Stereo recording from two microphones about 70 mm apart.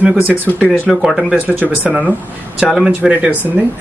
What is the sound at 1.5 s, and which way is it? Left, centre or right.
Speech, right.